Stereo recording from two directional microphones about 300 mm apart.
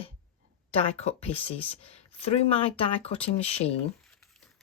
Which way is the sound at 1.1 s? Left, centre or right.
Centre.